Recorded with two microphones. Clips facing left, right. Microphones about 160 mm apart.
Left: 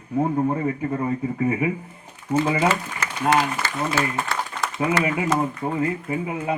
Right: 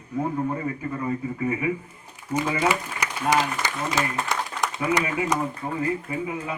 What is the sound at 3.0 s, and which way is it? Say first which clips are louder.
Applause: even; 15° right (ahead or behind).